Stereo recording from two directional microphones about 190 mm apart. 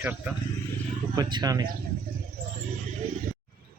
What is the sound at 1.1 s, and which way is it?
Speech, 20° right (ahead or behind).